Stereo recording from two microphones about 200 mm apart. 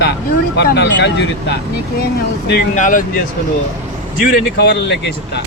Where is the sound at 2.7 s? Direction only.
40° left (ahead or behind).